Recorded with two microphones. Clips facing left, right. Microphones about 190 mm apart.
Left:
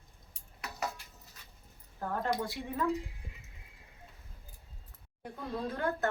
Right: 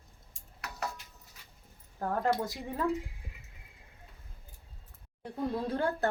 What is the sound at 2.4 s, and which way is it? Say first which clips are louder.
Speech: right 1 dB; 40° right (ahead or behind).